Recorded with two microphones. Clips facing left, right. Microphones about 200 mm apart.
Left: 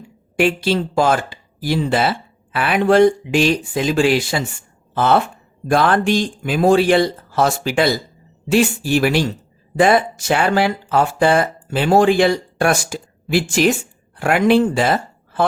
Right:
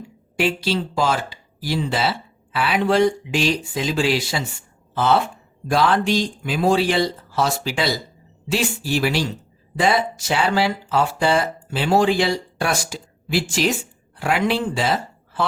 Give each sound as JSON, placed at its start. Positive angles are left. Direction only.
{"t": 0.3, "sound": "speech", "side_deg": 50}
{"t": 4.9, "sound": "a sound", "side_deg": 55}
{"t": 5.6, "sound": "speech", "side_deg": 55}